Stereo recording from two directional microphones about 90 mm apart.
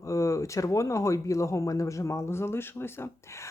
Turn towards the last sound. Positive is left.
turn(degrees=30)  # may be behind; listen again after turning